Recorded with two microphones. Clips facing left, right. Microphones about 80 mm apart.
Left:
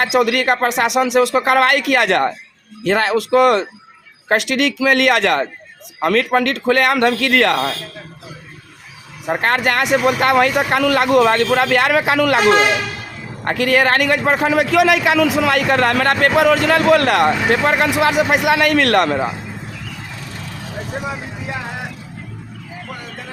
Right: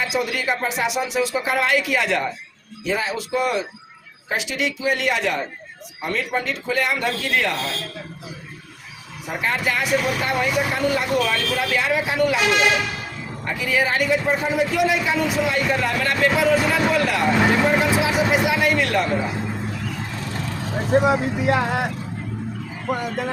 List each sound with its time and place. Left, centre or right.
0.0 s a man's voice: left
9.3 s a man's voice: left
12.4 s speech: left
13.4 s a man's voice: left
21.1 s speech: right